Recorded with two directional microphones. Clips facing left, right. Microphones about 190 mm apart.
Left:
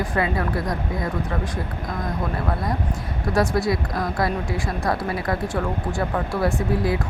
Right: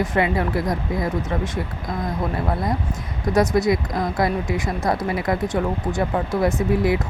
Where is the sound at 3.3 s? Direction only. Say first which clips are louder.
Right 3 dB; 20° right (ahead or behind).